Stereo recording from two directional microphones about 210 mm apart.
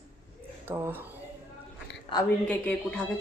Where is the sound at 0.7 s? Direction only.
10° right (ahead or behind).